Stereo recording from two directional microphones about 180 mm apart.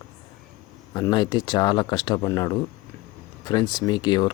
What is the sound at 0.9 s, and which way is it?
Speech, 25° left (ahead or behind).